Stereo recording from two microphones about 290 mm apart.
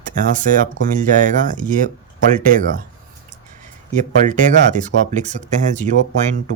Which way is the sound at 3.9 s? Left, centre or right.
Right.